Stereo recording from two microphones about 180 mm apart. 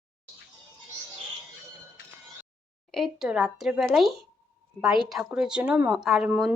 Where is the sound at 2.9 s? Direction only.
Centre (ahead or behind).